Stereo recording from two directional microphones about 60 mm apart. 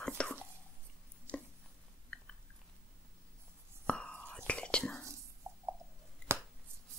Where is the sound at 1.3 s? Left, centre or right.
Centre.